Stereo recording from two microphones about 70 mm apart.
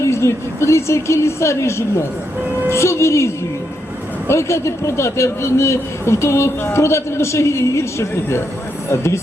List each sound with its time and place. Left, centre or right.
0.0 s a woman's voice: left